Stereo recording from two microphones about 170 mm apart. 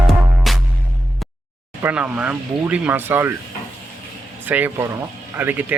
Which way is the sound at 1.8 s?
10° right (ahead or behind).